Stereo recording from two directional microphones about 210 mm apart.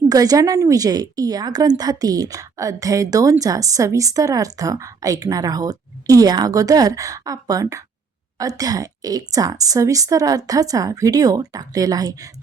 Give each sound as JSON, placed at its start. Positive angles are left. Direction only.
{"t": 0.1, "sound": "a woman's voice", "side_deg": -15}